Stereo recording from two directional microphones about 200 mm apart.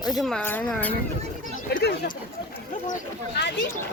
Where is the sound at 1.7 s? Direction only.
50° left (ahead or behind).